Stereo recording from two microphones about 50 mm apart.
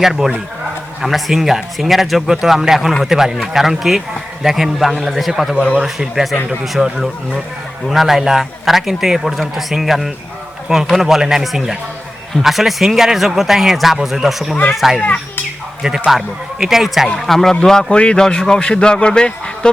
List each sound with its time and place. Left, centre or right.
0.0 s a man's voice: centre
14.5 s a man's voice: centre
14.8 s a man's voice: centre
16.0 s speech: centre
17.2 s a man's voice: centre